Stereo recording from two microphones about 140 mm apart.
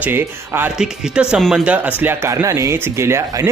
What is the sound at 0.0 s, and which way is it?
Speech, 15° right (ahead or behind).